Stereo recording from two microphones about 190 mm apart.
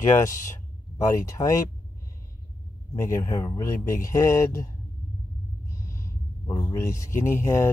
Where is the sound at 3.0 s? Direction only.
15° left (ahead or behind).